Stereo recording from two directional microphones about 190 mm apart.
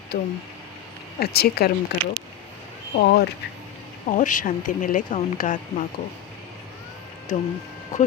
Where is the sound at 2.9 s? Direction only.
55° left (ahead or behind).